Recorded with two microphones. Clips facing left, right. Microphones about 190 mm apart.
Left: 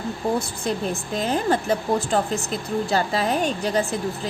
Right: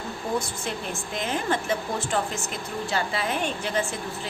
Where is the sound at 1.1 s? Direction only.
35° left (ahead or behind).